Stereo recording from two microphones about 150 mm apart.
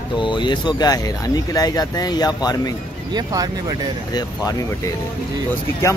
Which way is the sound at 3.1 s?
25° right (ahead or behind).